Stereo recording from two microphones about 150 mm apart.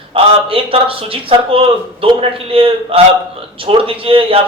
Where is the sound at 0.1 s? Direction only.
40° right (ahead or behind).